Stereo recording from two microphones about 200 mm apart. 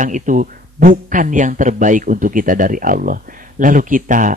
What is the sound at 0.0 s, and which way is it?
A man's voice, 40° right (ahead or behind).